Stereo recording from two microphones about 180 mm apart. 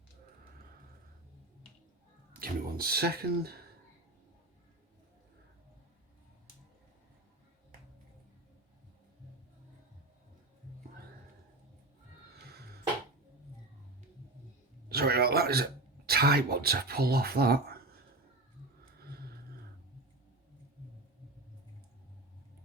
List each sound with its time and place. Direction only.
2.4 s speech: 60° right (ahead or behind)
14.8 s a sound: 60° right (ahead or behind)
16.0 s speech: 60° right (ahead or behind)